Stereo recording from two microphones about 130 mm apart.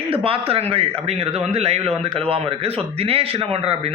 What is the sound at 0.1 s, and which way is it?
Speech, 45° right (ahead or behind).